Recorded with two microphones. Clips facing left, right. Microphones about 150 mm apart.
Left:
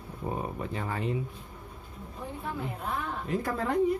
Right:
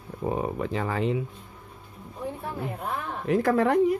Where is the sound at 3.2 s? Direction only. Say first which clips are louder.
Right 11 dB; 80° right.